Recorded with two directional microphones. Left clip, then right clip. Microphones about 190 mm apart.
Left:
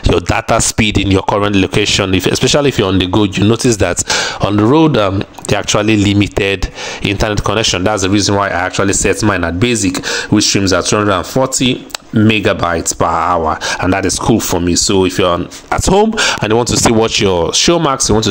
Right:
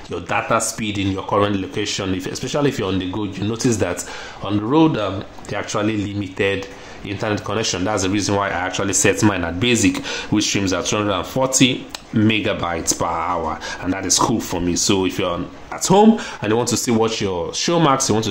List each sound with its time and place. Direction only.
0.1 s speech: 55° left (ahead or behind); by 18.1 s 40° left (ahead or behind)